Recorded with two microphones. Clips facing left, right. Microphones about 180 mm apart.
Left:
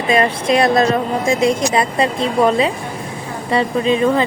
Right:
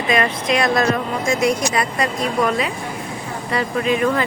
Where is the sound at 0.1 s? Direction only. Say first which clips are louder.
Left 4 dB; 30° left (ahead or behind).